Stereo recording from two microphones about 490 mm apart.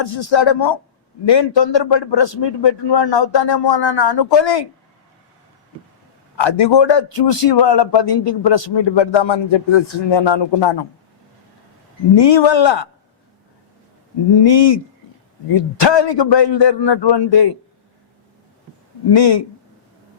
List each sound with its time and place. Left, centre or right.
0.0 s a man's voice: left
6.3 s a man's voice: left
12.1 s a man's voice: left
14.3 s a man's voice: left
19.1 s a man's voice: left